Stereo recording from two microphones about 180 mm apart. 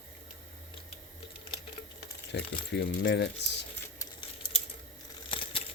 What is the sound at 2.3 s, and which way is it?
Speech, 70° left (ahead or behind).